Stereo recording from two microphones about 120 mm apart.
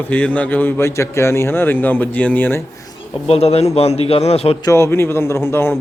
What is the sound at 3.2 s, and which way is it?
A man's voice, 60° left (ahead or behind).